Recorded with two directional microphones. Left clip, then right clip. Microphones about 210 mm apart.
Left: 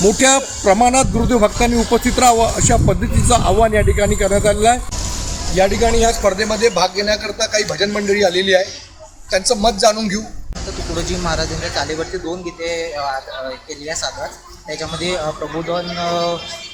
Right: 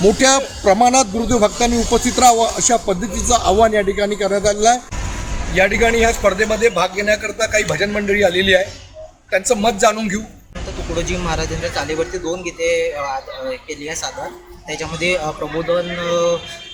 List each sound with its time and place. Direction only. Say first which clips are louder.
0.0 s speech: even; 5° left (ahead or behind)
6.1 s a man's voice: even; 5° right (ahead or behind)
11.3 s speech: left 1 dB; 40° right (ahead or behind)
14.7 s speech: right 2 dB; 40° right (ahead or behind)
15.7 s a man's voice: right 2 dB; 10° right (ahead or behind)